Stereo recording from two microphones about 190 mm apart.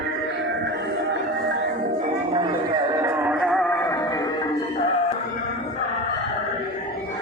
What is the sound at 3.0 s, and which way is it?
Music, 15° right (ahead or behind).